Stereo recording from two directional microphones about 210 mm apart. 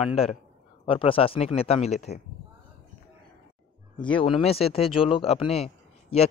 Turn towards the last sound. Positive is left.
turn(degrees=30)  # may be behind; listen again after turning